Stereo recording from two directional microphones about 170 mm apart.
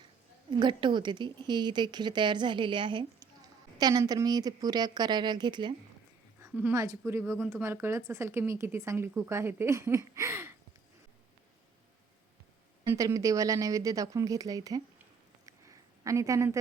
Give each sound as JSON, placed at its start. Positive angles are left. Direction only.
{"t": 0.5, "sound": "a woman's voice", "side_deg": -25}
{"t": 6.4, "sound": "speech", "side_deg": -15}
{"t": 12.8, "sound": "a woman's voice", "side_deg": -15}
{"t": 15.4, "sound": "a sound", "side_deg": -20}